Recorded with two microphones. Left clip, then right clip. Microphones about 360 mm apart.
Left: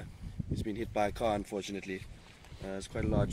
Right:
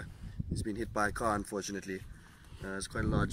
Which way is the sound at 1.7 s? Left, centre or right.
Right.